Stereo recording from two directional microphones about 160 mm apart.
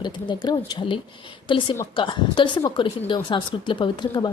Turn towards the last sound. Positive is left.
turn(degrees=30)  # may be behind; listen again after turning